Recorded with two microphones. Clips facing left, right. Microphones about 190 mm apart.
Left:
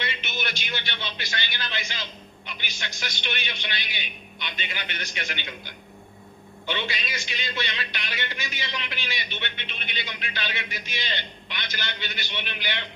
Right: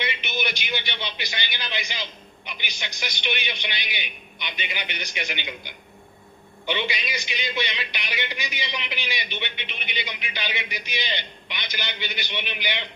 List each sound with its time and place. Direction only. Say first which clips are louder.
0.0 s a man's voice: right 3 dB; 15° right (ahead or behind)